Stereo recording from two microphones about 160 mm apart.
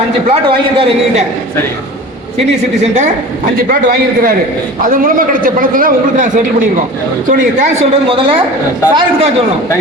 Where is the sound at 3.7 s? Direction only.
60° right (ahead or behind); by 8.4 s 35° right (ahead or behind).